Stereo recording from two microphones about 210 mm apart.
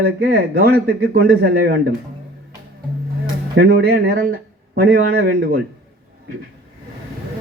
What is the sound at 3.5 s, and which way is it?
Speech, 50° right (ahead or behind).